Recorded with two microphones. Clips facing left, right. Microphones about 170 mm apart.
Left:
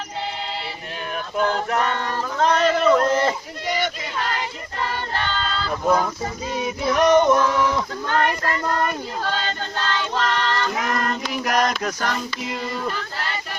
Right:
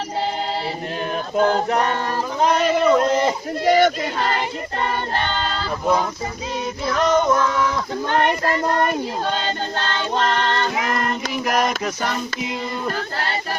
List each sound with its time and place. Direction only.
1.7 s a sound: 20° right (ahead or behind)
2.4 s a man's voice: 10° right (ahead or behind)
3.7 s child singing: 50° right (ahead or behind)
5.8 s child singing: centre (ahead or behind)
6.6 s female singing: 10° left (ahead or behind)
8.1 s a sound: 20° right (ahead or behind)
9.8 s music: 30° right (ahead or behind)
10.8 s child singing: 5° right (ahead or behind)
11.8 s a man's voice: 5° right (ahead or behind)